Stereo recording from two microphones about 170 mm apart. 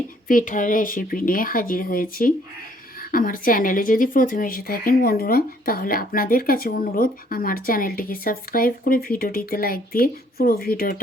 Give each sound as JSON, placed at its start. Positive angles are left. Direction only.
{"t": 0.3, "sound": "speech", "side_deg": 50}